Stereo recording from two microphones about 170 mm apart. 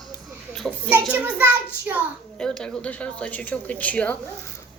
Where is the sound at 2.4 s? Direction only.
5° left (ahead or behind).